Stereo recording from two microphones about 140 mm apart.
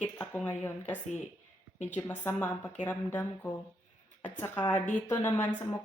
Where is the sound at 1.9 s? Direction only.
15° left (ahead or behind).